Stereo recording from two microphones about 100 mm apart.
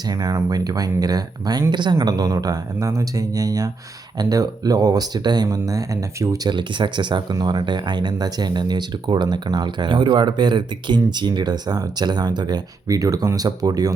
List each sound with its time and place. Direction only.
0.1 s speech: 40° right (ahead or behind)